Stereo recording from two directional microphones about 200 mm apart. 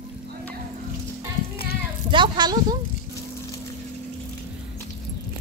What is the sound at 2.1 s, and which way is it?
Speech, 25° right (ahead or behind).